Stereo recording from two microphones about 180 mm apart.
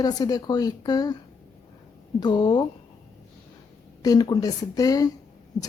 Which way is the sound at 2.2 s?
25° left (ahead or behind).